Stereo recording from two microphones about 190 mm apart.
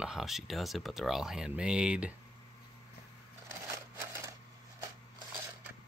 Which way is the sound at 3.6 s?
15° right (ahead or behind).